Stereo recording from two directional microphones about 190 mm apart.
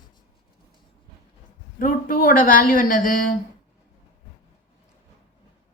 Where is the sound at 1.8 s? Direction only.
45° left (ahead or behind).